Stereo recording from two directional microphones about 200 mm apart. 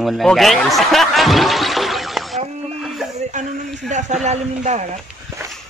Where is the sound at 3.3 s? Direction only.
35° right (ahead or behind).